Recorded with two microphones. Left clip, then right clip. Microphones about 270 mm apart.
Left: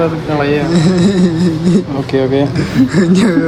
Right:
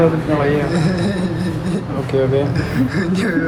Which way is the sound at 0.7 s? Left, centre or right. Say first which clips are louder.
Left 6 dB; centre.